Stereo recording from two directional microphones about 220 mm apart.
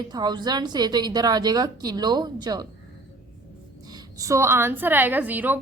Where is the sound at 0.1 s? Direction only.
20° right (ahead or behind).